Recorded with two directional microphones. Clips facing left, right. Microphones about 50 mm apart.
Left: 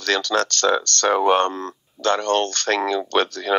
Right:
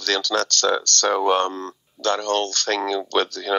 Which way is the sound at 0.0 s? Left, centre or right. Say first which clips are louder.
Left 2 dB; left.